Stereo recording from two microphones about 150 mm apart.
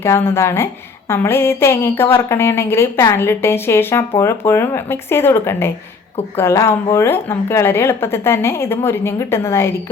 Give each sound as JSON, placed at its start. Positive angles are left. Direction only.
{"t": 0.0, "sound": "a woman's voice", "side_deg": 15}